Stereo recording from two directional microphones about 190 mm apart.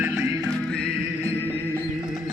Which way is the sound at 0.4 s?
5° left (ahead or behind).